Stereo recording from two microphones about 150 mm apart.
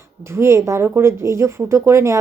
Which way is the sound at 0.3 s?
20° right (ahead or behind).